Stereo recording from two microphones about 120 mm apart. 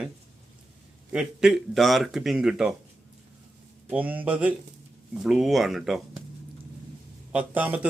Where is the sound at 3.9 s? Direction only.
15° right (ahead or behind).